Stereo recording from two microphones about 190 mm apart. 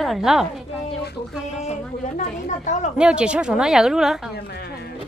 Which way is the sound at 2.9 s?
5° right (ahead or behind).